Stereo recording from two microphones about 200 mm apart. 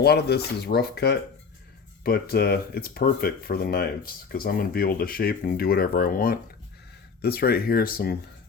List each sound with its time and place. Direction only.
0.0 s speech: 55° left (ahead or behind)